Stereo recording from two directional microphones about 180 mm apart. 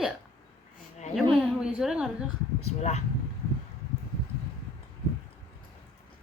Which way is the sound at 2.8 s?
35° left (ahead or behind).